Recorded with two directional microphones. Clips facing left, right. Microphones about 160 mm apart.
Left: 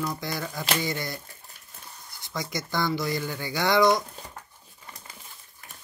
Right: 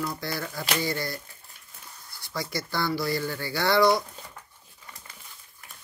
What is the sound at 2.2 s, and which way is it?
Speech, 20° left (ahead or behind).